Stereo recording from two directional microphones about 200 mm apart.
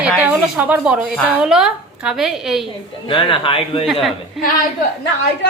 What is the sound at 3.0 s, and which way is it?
Speech, 25° left (ahead or behind).